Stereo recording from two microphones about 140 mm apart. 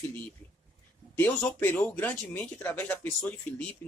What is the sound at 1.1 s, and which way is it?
Speech, 15° left (ahead or behind).